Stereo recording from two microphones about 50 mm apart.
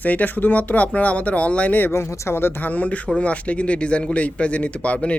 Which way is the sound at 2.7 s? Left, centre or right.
Left.